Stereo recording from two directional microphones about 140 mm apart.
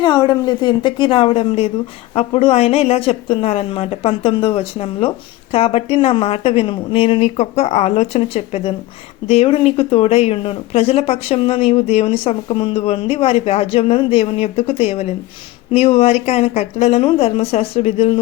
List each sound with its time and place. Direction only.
0.0 s a woman's voice: 30° left (ahead or behind); by 18.2 s 45° left (ahead or behind)